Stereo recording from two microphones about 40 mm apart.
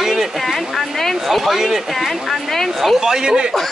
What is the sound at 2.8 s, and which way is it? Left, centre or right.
Speech, centre.